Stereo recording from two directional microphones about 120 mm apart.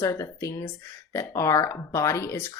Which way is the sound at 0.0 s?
25° left (ahead or behind).